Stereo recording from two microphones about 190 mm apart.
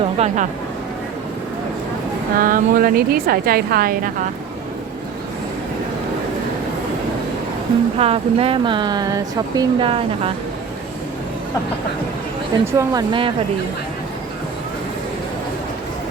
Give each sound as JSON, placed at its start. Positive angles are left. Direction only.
{"t": 0.0, "sound": "a sound", "side_deg": -35}
{"t": 2.4, "sound": "a woman's voice", "side_deg": -50}
{"t": 7.9, "sound": "speech", "side_deg": -30}
{"t": 12.6, "sound": "speech", "side_deg": -15}